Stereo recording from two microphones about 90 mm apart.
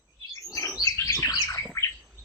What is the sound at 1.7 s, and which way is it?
Squawk, 30° left (ahead or behind).